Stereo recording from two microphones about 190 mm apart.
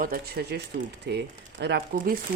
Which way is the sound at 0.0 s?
50° right (ahead or behind).